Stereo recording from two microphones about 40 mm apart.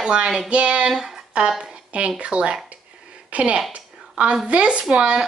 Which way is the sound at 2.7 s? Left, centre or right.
Right.